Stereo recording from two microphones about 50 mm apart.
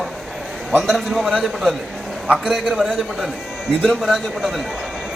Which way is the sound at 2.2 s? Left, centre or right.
Centre.